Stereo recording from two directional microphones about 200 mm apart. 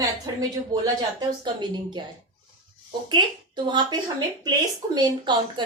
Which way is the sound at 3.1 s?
25° right (ahead or behind).